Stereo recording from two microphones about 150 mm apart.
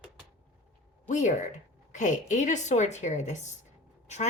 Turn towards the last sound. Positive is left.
turn(degrees=50)  # may be behind; listen again after turning